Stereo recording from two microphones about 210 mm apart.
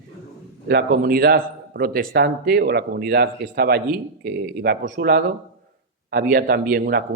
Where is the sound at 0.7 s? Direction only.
45° right (ahead or behind).